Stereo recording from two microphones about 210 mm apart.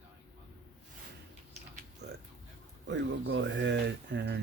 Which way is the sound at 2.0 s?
55° right (ahead or behind).